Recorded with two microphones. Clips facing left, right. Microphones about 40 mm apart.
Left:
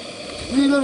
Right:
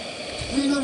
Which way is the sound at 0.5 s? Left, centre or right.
Left.